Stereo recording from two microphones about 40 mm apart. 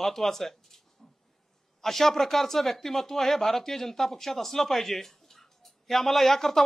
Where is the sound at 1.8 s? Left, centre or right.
Centre.